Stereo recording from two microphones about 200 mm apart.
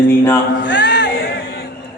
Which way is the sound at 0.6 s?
60° left (ahead or behind).